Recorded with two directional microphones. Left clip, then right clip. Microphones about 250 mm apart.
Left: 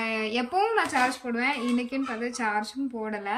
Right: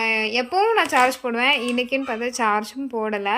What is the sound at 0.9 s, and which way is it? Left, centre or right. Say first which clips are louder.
A woman's voice: right 7 dB; centre.